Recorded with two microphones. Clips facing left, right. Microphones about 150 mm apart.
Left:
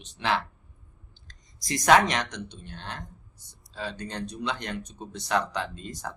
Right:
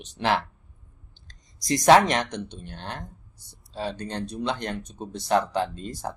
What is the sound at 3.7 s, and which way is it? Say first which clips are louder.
Speech: right 4 dB; 30° right (ahead or behind).